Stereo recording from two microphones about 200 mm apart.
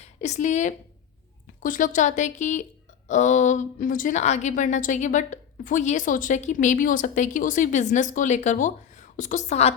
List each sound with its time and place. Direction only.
0.0 s a woman's voice: 35° left (ahead or behind)